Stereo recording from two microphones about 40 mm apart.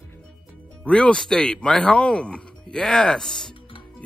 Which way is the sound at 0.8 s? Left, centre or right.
Left.